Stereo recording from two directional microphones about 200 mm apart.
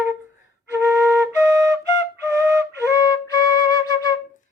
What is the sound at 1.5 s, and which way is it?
Flute, 15° right (ahead or behind).